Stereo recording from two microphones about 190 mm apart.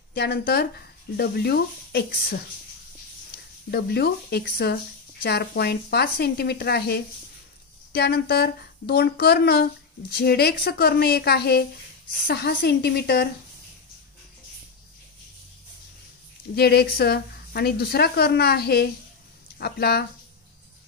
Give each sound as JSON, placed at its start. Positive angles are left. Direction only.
{"t": 0.1, "sound": "a woman's voice", "side_deg": 55}
{"t": 3.7, "sound": "a woman's voice", "side_deg": 60}
{"t": 16.5, "sound": "a woman's voice", "side_deg": 55}